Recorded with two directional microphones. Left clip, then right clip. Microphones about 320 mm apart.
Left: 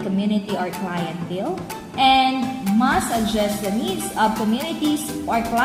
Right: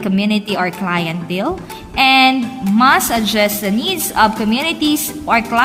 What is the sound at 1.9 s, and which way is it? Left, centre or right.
Music, right.